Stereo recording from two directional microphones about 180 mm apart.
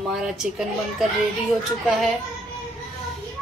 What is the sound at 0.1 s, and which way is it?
Speech, 5° right (ahead or behind).